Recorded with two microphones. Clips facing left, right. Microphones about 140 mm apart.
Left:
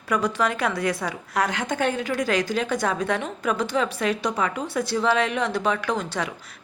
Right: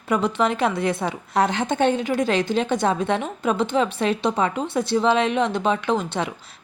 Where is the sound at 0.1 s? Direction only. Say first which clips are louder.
Right 2 dB; 25° right (ahead or behind).